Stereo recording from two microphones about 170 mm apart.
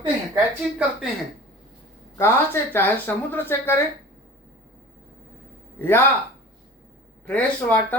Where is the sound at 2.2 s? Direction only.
15° left (ahead or behind).